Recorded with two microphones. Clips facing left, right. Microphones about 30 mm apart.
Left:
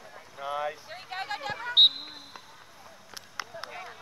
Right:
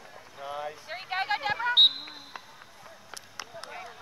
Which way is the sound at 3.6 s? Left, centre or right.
Centre.